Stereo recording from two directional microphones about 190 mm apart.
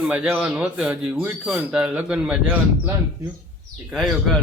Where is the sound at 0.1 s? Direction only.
5° right (ahead or behind).